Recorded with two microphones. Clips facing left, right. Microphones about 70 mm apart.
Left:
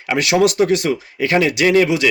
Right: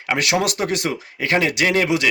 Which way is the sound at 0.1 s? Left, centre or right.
Right.